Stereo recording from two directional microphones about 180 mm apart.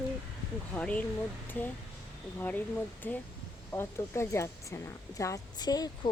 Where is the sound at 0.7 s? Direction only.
10° left (ahead or behind).